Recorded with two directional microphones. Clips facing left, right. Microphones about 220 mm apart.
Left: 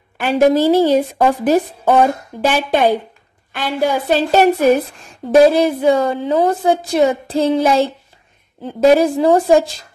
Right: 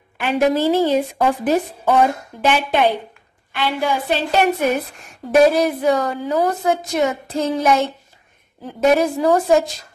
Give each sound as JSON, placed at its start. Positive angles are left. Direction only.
{"t": 0.2, "sound": "a woman's voice", "side_deg": 35}